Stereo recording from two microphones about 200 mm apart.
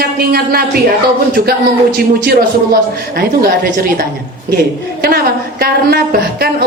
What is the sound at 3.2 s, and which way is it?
Speech, 50° right (ahead or behind).